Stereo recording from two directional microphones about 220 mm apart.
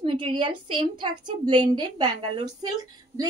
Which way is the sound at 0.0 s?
20° right (ahead or behind).